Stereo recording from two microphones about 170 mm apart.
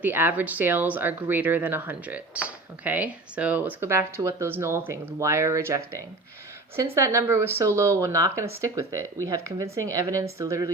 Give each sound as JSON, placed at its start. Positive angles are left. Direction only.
{"t": 0.0, "sound": "speech", "side_deg": -10}
{"t": 6.9, "sound": "speech", "side_deg": -15}